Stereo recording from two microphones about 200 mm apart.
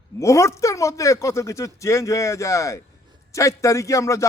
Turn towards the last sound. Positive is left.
turn(degrees=15)  # may be behind; listen again after turning